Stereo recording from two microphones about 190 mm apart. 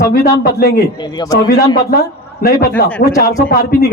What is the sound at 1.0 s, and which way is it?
Speech, 20° left (ahead or behind).